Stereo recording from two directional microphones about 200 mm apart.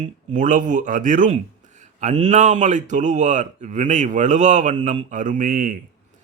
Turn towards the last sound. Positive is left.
turn(degrees=-45)  # may be behind; listen again after turning